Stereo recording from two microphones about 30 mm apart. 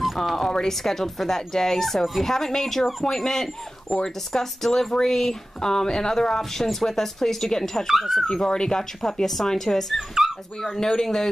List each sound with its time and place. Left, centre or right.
0.0 s a sound: centre
0.7 s speech: centre
9.9 s speech: centre
10.8 s speech: centre